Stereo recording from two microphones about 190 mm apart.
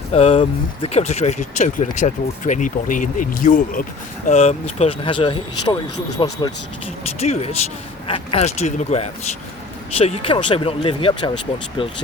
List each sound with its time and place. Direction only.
0.1 s speech: 30° left (ahead or behind)
4.3 s speech: 35° left (ahead or behind)
7.0 s speech: 35° left (ahead or behind)